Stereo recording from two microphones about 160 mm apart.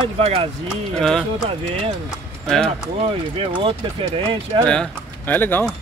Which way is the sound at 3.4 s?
35° right (ahead or behind).